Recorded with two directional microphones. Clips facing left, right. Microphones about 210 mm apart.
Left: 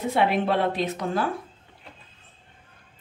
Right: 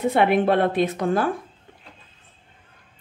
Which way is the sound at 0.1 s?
55° right (ahead or behind).